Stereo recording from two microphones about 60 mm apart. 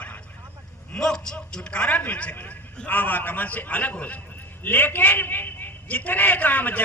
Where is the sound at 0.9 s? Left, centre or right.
Centre; by 6.8 s left.